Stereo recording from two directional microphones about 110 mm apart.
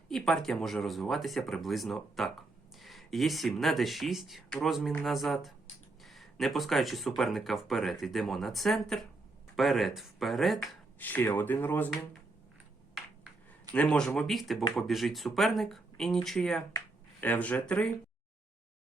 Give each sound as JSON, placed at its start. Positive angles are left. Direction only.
{"t": 0.1, "sound": "speech", "side_deg": 5}
{"t": 11.0, "sound": "speech", "side_deg": 20}
{"t": 13.7, "sound": "speech", "side_deg": 5}
{"t": 17.2, "sound": "speech", "side_deg": 15}